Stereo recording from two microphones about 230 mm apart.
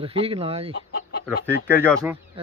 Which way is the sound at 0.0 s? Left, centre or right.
Right.